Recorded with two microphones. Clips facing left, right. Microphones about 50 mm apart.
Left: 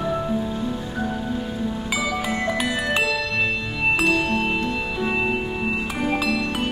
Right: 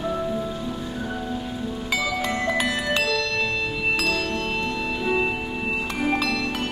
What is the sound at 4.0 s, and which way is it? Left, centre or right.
Music, left.